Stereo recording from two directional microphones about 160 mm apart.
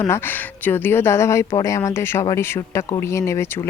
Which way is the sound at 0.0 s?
10° left (ahead or behind).